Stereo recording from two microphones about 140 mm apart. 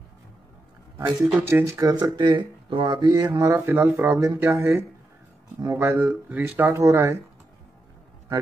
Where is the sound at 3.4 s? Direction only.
20° right (ahead or behind).